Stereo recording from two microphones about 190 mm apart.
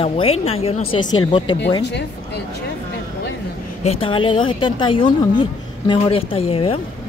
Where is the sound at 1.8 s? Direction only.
65° left (ahead or behind).